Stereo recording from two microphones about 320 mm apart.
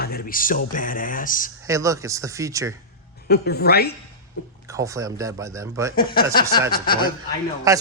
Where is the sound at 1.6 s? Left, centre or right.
Centre.